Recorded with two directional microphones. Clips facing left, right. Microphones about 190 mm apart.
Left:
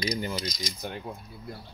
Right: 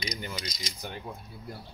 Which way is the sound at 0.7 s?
Centre (ahead or behind).